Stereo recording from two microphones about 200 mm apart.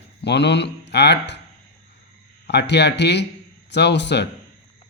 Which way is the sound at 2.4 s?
55° left (ahead or behind).